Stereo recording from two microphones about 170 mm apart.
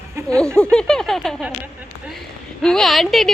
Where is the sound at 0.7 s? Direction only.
5° left (ahead or behind).